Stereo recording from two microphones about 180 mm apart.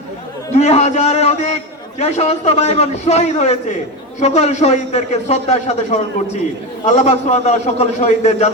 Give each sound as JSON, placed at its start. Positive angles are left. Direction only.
{"t": 0.5, "sound": "a man's voice", "side_deg": 35}